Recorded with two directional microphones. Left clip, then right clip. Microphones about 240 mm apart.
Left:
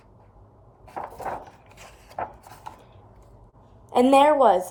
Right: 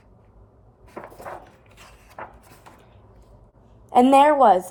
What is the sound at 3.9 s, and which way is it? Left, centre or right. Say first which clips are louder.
Speech: right 2 dB; right.